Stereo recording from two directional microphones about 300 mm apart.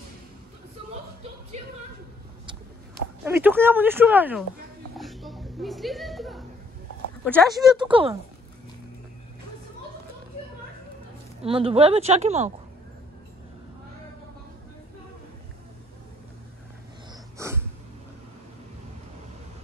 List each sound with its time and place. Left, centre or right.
1.5 s a sound: right
3.3 s speech: centre
4.9 s chuckle: centre
7.2 s speech: centre
7.8 s speech: centre
11.4 s a woman's voice: centre
17.4 s a sound: centre